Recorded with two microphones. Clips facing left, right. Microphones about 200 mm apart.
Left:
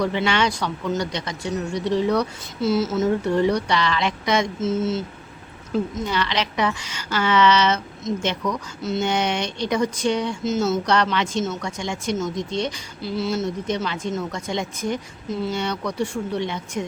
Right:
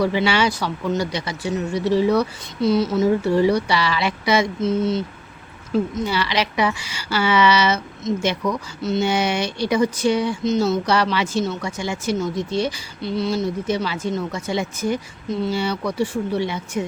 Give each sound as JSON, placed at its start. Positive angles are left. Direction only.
{"t": 0.0, "sound": "a woman's voice", "side_deg": -5}
{"t": 5.9, "sound": "a woman's voice", "side_deg": -10}